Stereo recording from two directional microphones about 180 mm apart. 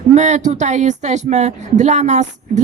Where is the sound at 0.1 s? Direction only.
40° right (ahead or behind).